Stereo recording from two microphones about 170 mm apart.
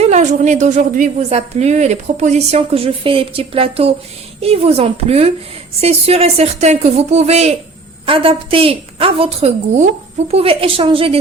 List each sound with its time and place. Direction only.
0.0 s a woman's voice: 45° right (ahead or behind)